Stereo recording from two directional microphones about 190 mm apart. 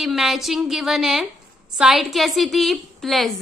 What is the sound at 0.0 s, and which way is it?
A woman's voice, centre (ahead or behind).